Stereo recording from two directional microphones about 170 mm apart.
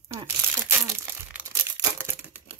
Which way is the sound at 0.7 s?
15° right (ahead or behind).